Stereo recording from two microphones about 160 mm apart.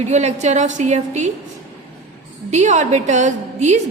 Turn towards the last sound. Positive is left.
turn(degrees=-50)  # may be behind; listen again after turning